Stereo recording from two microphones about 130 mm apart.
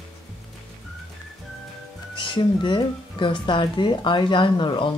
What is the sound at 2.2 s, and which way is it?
Speech, 40° left (ahead or behind).